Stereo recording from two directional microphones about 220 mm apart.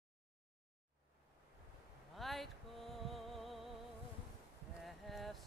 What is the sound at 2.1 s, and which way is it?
Music, centre (ahead or behind).